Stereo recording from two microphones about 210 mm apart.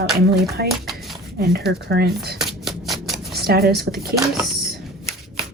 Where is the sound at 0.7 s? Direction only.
Centre (ahead or behind).